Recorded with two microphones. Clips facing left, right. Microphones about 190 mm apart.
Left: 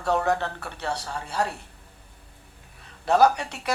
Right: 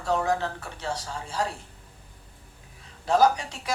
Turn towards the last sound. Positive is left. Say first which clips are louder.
# left 2 dB
turn(degrees=65)  # may be behind; listen again after turning